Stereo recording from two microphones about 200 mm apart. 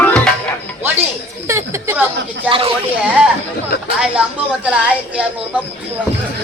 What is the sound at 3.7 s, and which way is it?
Speech, 50° left (ahead or behind).